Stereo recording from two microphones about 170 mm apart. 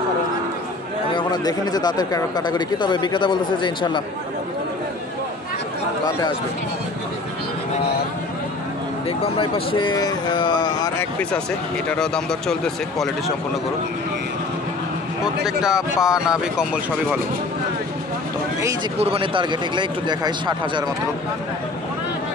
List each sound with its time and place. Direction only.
1.1 s speech: 25° left (ahead or behind)
9.2 s speech: 30° left (ahead or behind)
11.0 s speech: 10° left (ahead or behind)
15.4 s speech: 5° right (ahead or behind)
18.9 s speech: 35° right (ahead or behind)